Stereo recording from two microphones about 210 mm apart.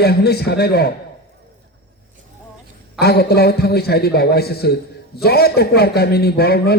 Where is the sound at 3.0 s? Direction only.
50° left (ahead or behind).